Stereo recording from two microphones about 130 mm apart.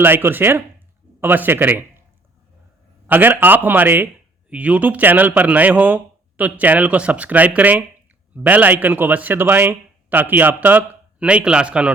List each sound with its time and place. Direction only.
0.0 s speech: 15° right (ahead or behind)
3.1 s speech: 15° right (ahead or behind)